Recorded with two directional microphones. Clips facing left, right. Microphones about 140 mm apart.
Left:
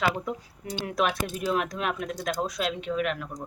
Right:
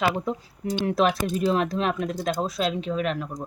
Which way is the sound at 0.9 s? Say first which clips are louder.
Right 4 dB; 30° right (ahead or behind).